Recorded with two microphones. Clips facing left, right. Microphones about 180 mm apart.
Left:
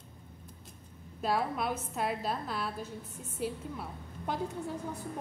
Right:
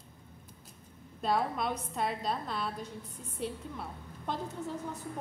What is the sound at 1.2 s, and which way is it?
A woman's voice, 5° left (ahead or behind).